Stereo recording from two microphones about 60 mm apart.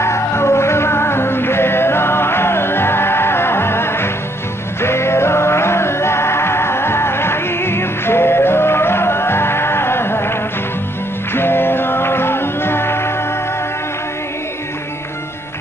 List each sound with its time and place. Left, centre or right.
0.0 s music: left
11.3 s music: left